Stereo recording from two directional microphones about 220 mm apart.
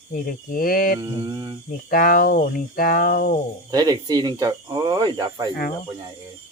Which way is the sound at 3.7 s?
15° right (ahead or behind).